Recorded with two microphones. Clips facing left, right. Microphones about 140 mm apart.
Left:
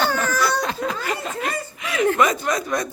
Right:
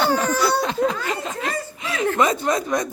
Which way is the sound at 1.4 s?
30° right (ahead or behind).